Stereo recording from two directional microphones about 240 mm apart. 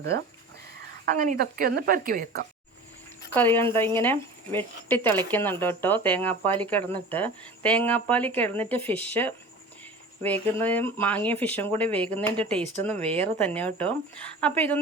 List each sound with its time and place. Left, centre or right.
1.0 s speech: right
3.3 s speech: centre